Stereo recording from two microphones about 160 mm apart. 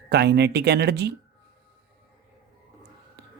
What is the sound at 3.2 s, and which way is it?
Whispering, 90° right.